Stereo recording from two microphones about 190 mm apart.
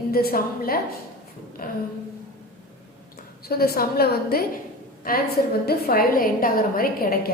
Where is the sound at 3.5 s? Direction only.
55° left (ahead or behind).